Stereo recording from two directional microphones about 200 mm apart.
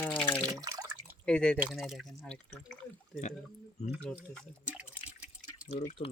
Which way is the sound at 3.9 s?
5° right (ahead or behind).